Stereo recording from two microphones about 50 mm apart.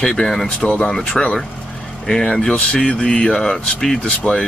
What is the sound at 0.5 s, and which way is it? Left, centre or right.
Speech, left.